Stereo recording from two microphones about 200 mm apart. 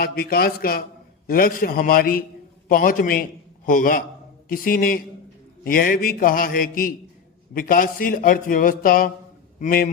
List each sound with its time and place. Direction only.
0.0 s a man's voice: 50° left (ahead or behind)